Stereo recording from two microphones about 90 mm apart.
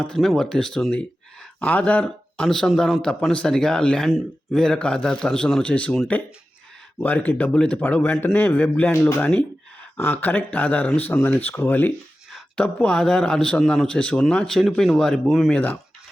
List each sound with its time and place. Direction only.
0.0 s speech: centre (ahead or behind)
7.0 s speech: 20° left (ahead or behind); by 15.4 s 5° right (ahead or behind)
15.4 s speech: 15° left (ahead or behind)